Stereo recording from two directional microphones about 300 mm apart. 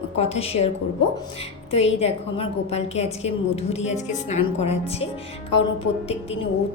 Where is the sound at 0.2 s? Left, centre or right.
Centre.